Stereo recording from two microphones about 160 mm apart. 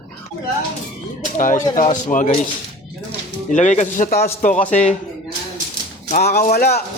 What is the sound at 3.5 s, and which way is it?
Speech, 50° left (ahead or behind).